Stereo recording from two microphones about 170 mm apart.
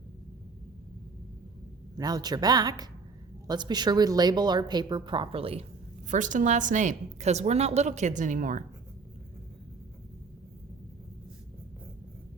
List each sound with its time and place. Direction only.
2.0 s speech: 20° right (ahead or behind)
6.1 s a woman's voice: 50° right (ahead or behind)